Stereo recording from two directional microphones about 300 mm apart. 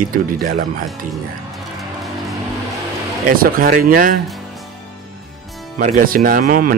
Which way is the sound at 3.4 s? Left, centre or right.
Right.